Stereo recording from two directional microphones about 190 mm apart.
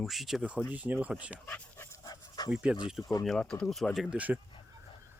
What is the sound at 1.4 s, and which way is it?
Dog, 10° left (ahead or behind).